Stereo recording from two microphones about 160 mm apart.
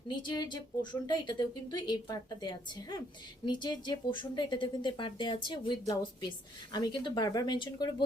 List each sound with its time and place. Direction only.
0.2 s speech: 30° left (ahead or behind)